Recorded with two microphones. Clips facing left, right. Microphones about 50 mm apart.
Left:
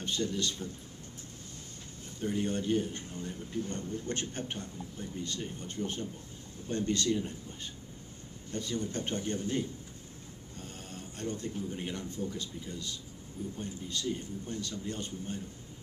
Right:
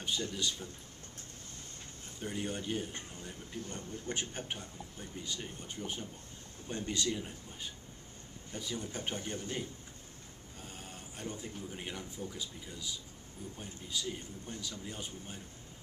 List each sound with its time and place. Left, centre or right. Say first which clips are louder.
0.0 s speech: left 3 dB; centre
2.2 s speech: left 6 dB; centre
8.5 s speech: left 5 dB; centre